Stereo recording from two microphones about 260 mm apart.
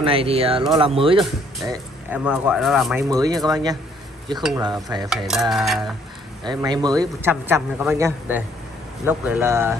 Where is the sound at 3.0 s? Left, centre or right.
Centre.